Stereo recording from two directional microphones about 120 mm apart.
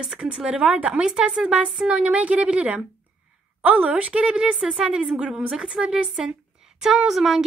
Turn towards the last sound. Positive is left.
turn(degrees=-5)  # may be behind; listen again after turning